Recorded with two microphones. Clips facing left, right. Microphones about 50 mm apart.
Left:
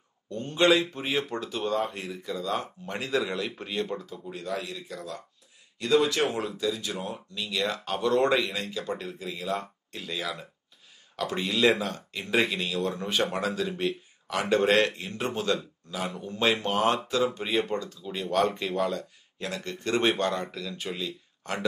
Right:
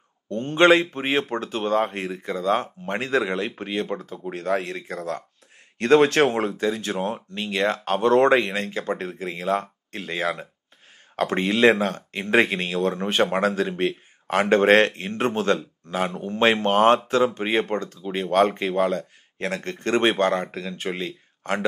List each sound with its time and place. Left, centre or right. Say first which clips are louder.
0.3 s speech: right 6 dB; right